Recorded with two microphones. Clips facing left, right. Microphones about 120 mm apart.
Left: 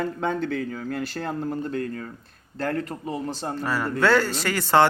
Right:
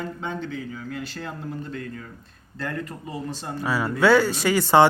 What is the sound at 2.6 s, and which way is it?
Speech, 35° left (ahead or behind).